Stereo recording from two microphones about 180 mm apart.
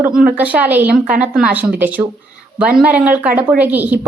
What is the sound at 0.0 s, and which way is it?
A woman's voice, 5° right (ahead or behind).